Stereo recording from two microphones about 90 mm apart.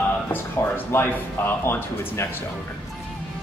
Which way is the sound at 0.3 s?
25° left (ahead or behind).